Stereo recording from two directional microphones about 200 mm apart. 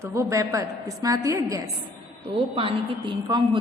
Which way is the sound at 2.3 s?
25° right (ahead or behind).